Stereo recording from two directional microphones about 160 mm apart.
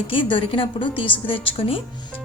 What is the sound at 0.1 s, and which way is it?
A woman's voice, 30° left (ahead or behind).